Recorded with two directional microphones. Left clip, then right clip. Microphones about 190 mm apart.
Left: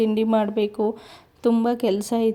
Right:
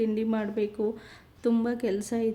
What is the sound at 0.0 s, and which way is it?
A woman's voice, 35° left (ahead or behind).